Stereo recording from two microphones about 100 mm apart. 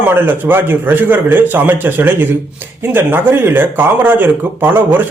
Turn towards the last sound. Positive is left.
turn(degrees=-20)  # may be behind; listen again after turning